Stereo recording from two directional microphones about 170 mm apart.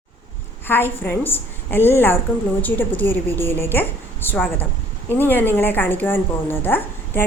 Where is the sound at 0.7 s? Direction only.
10° left (ahead or behind).